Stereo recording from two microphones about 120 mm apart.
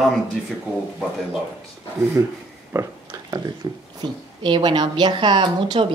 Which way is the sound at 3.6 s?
35° right (ahead or behind).